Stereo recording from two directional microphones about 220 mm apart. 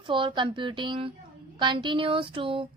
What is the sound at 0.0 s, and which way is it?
A woman's voice, 20° right (ahead or behind).